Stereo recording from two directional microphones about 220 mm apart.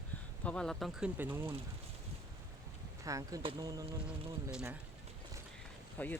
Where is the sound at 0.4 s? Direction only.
5° left (ahead or behind).